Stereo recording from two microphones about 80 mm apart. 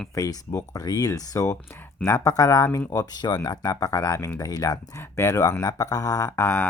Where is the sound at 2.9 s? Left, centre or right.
Left.